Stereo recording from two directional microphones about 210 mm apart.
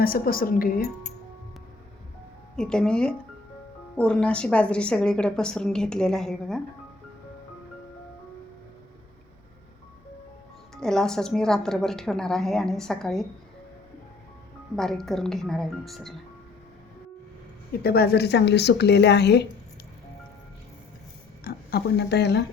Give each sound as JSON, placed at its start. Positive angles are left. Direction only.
{"t": 0.0, "sound": "a woman's voice", "side_deg": 45}
{"t": 2.6, "sound": "a woman's voice", "side_deg": 5}
{"t": 10.8, "sound": "a woman's voice", "side_deg": 0}
{"t": 14.8, "sound": "a woman's voice", "side_deg": 0}
{"t": 17.8, "sound": "a woman's voice", "side_deg": 50}
{"t": 21.4, "sound": "a woman's voice", "side_deg": 50}